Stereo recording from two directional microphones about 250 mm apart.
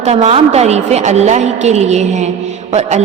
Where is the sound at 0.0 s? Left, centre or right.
Right.